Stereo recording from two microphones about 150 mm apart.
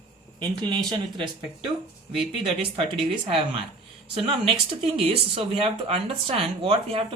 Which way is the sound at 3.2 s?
35° right (ahead or behind).